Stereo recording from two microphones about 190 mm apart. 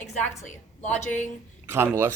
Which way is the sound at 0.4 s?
40° left (ahead or behind).